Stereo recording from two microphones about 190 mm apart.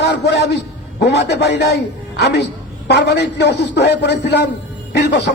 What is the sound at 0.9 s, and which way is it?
A man's voice, 60° left (ahead or behind).